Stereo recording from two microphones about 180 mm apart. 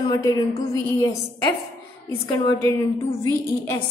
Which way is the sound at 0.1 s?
20° left (ahead or behind).